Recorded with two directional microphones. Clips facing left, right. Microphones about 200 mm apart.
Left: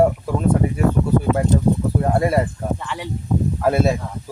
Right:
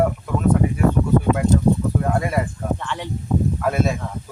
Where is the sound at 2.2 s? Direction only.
35° left (ahead or behind).